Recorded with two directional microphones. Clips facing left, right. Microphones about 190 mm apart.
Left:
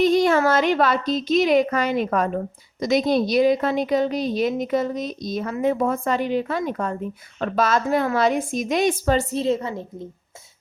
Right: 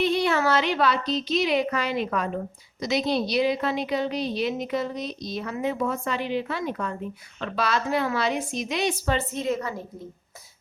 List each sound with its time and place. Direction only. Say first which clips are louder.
0.0 s a woman's voice: left 6 dB; 45° left (ahead or behind); by 9.8 s 25° left (ahead or behind)